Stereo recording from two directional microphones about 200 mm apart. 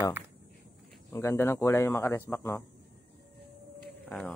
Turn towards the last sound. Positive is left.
turn(degrees=10)  # may be behind; listen again after turning